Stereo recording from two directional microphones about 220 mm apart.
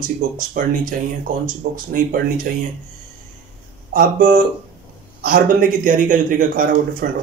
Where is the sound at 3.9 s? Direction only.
40° right (ahead or behind).